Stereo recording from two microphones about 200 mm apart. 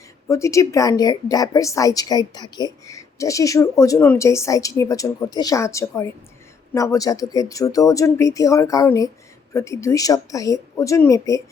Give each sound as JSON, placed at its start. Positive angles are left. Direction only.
{"t": 0.3, "sound": "speech", "side_deg": 15}